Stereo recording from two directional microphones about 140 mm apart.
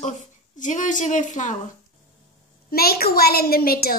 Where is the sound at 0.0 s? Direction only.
60° left (ahead or behind).